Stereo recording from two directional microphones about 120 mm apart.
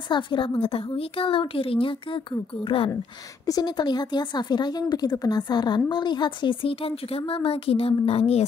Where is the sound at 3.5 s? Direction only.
35° left (ahead or behind); by 8.5 s 55° left (ahead or behind).